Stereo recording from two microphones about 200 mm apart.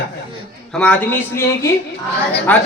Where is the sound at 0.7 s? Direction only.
5° left (ahead or behind).